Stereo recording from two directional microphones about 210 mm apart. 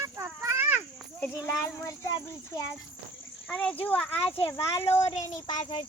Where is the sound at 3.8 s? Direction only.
10° left (ahead or behind).